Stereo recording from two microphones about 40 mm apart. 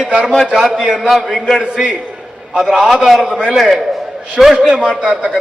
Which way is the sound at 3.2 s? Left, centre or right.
Centre.